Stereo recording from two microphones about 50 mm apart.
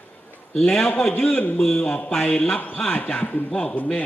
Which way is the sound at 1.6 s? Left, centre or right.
Centre.